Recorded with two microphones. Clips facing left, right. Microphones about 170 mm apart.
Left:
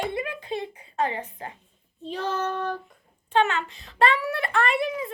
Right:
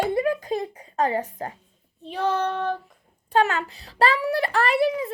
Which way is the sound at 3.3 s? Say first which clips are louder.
Right 1 dB; 40° right (ahead or behind).